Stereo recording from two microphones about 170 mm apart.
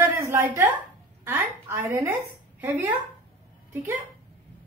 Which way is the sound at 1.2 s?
15° right (ahead or behind).